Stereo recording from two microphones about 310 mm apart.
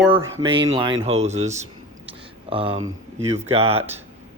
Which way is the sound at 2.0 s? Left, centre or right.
Centre.